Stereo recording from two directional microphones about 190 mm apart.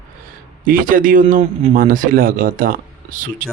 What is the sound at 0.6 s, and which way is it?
Speech, 45° right (ahead or behind).